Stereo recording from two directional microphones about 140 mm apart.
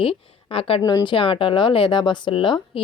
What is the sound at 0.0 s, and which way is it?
Speech, 40° left (ahead or behind).